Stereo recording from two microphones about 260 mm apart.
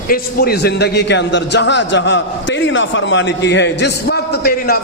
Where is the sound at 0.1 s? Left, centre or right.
Left.